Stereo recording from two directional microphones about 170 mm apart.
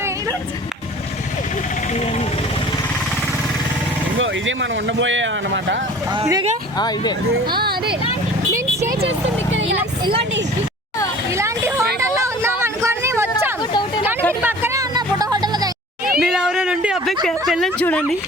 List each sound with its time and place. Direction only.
1.9 s a sound: 40° left (ahead or behind)
4.4 s speech: 90° right
6.1 s speech: 25° right (ahead or behind)
6.7 s speech: 25° left (ahead or behind)
7.6 s speech: 70° right (ahead or behind)
9.5 s speech: 90° right
10.0 s speech: 30° right (ahead or behind)
11.3 s a sound: 15° right (ahead or behind)
11.9 s vehicle: 15° right (ahead or behind)
13.6 s a sound: 25° left (ahead or behind)
14.4 s music: 15° right (ahead or behind)
16.2 s a sound: 5° right (ahead or behind)
17.2 s speech: centre (ahead or behind)